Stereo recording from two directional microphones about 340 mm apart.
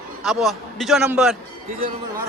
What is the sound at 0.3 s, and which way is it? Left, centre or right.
A man's voice, centre.